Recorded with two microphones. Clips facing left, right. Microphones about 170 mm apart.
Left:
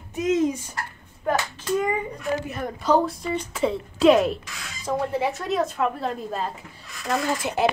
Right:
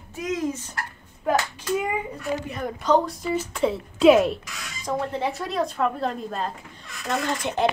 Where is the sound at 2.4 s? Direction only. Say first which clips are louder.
Even; 5° left (ahead or behind).